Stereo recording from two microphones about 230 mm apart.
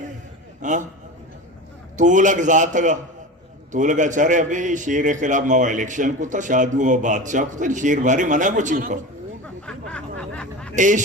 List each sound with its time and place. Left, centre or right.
0.6 s a man's voice: right
2.0 s a man's voice: right
9.6 s snicker: centre
10.8 s a man's voice: right